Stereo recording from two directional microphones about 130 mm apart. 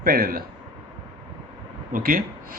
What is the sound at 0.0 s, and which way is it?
Speech, 90° right.